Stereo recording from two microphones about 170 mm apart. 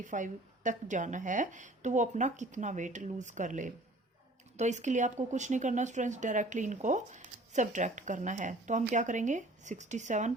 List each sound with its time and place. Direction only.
0.0 s speech: 45° right (ahead or behind)